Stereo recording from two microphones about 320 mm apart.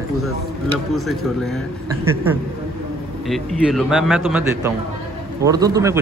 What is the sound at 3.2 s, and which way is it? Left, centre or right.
A man's voice, centre.